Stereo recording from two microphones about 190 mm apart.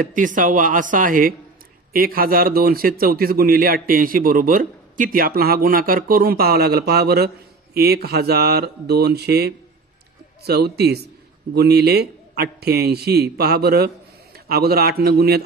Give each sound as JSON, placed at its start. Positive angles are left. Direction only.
{"t": 0.0, "sound": "a man's voice", "side_deg": -45}